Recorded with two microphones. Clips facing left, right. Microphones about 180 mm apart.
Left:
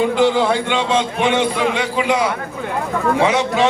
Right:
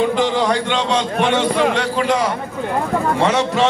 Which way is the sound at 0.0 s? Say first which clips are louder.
Left 2 dB; 10° left (ahead or behind).